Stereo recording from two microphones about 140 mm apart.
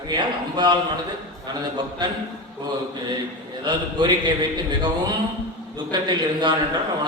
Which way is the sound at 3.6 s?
30° right (ahead or behind).